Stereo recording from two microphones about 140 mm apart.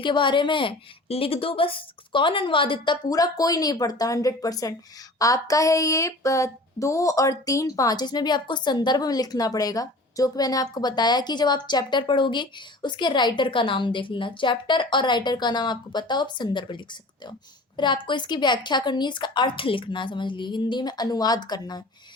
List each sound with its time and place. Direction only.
0.0 s speech: 35° left (ahead or behind)